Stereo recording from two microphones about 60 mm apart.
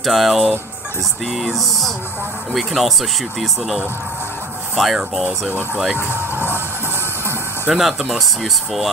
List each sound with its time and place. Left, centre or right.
0.0 s speech: centre
5.9 s speech: right
7.7 s speech: centre